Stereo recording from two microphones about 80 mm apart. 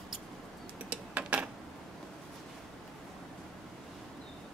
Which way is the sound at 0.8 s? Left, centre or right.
Centre.